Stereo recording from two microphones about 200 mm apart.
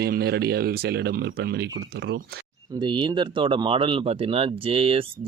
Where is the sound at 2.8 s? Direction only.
25° right (ahead or behind).